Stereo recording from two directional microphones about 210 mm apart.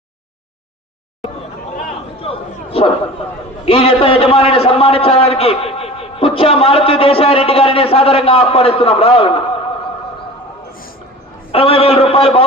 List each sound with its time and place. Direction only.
2.2 s a sound: 25° left (ahead or behind)
3.7 s a man's voice: 25° left (ahead or behind)
11.5 s a man's voice: 25° left (ahead or behind)